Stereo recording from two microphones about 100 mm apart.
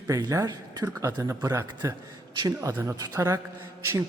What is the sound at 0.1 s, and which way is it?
A woman's voice, 35° right (ahead or behind).